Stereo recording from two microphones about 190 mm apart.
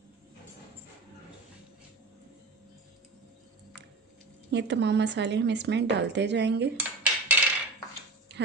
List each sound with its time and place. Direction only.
4.5 s speech: 65° right (ahead or behind)
6.8 s dishes: 10° right (ahead or behind)